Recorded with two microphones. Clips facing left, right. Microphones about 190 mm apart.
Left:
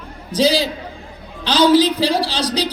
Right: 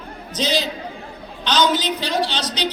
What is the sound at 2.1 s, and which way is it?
Speech, 10° left (ahead or behind).